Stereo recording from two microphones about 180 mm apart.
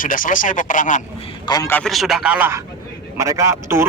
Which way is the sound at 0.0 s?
50° left (ahead or behind).